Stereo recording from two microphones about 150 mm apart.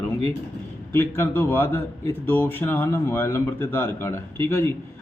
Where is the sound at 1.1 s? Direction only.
15° left (ahead or behind).